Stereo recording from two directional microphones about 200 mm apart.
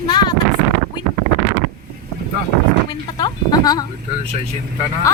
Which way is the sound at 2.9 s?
20° left (ahead or behind).